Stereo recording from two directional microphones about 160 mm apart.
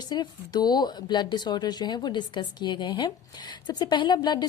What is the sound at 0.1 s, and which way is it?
Speech, 25° left (ahead or behind).